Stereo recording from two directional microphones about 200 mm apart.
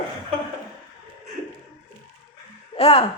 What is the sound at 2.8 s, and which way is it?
Speech, 30° left (ahead or behind).